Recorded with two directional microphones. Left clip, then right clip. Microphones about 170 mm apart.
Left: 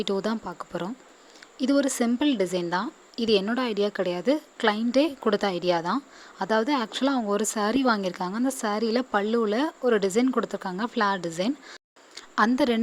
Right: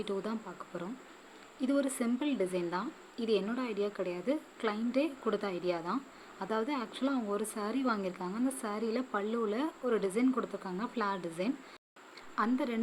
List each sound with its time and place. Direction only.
0.0 s speech: 50° left (ahead or behind)